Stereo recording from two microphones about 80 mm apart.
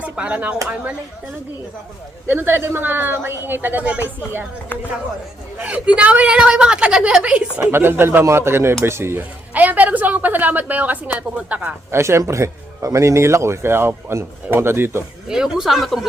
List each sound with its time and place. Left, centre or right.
0.0 s speech: centre
2.2 s a woman's voice: right
5.6 s a woman's voice: centre
7.7 s a man's voice: right
9.5 s a woman's voice: right
11.9 s a man's voice: right
15.3 s speech: centre